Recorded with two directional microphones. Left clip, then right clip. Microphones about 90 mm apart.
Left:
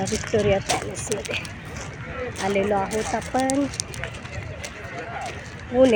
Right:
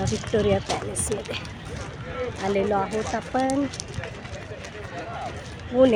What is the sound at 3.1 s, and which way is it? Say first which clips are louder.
Speech: left 2 dB; 20° left (ahead or behind).